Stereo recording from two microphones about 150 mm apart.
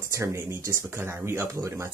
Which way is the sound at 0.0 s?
20° right (ahead or behind).